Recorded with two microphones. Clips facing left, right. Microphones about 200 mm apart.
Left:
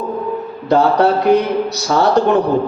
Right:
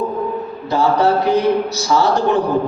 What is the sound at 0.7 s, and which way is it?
A man's voice, 60° left (ahead or behind).